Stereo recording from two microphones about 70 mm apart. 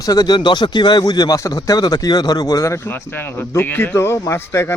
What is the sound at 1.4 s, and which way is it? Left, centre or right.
Speech, left.